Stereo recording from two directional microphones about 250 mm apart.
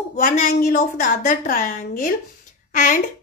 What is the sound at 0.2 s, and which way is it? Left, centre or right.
A woman's voice, left.